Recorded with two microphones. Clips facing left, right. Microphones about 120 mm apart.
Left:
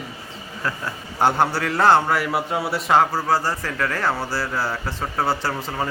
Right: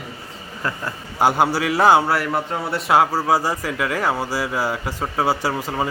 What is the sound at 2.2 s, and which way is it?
A man's voice, 5° left (ahead or behind).